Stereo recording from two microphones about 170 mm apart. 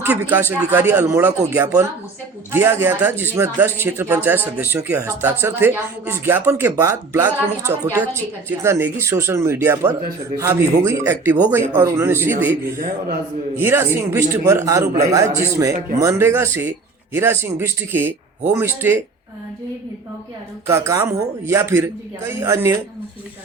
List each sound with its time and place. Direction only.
0.0 s speech: 10° right (ahead or behind)
13.6 s speech: 15° right (ahead or behind)
20.7 s speech: 15° right (ahead or behind)